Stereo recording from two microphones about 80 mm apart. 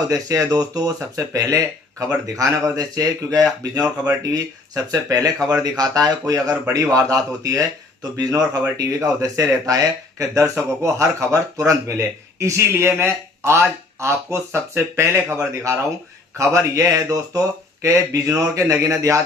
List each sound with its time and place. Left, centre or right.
0.1 s speech: right
16.4 s speech: right